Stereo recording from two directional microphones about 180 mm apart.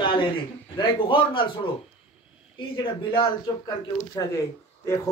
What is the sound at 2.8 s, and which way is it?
A man's voice, 25° left (ahead or behind).